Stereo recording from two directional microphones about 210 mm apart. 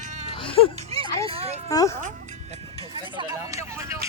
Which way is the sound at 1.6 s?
15° left (ahead or behind).